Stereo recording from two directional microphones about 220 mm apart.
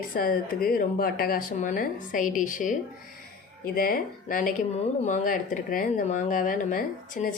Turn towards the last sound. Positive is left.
turn(degrees=35)  # may be behind; listen again after turning